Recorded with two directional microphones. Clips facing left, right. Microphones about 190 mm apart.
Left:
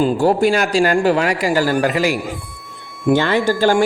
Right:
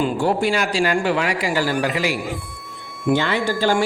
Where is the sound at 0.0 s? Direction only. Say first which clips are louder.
Left 5 dB; 40° left (ahead or behind).